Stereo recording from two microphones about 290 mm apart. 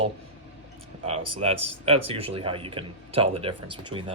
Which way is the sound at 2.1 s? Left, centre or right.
Centre.